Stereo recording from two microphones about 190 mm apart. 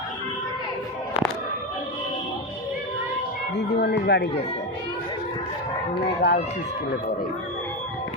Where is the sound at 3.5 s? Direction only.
60° left (ahead or behind).